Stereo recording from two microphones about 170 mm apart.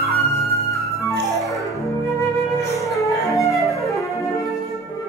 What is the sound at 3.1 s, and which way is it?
Music, 20° left (ahead or behind).